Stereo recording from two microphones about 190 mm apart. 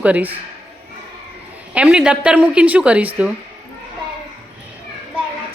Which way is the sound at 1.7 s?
5° right (ahead or behind).